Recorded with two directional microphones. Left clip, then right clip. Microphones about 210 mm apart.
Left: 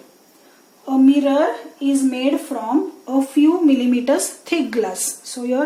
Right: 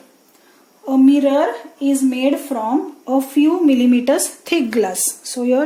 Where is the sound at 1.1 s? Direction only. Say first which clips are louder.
Right 1 dB; 50° right (ahead or behind).